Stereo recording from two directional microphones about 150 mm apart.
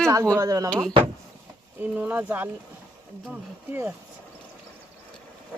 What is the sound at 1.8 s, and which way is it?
Speech, 10° right (ahead or behind).